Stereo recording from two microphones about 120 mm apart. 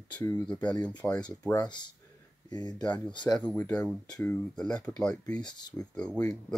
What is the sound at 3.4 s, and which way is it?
Speech, 10° left (ahead or behind).